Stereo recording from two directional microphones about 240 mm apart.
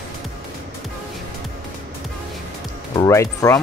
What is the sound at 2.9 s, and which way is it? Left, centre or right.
Speech, centre.